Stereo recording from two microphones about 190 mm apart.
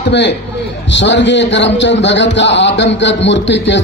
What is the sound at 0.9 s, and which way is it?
A man's voice, 70° left (ahead or behind).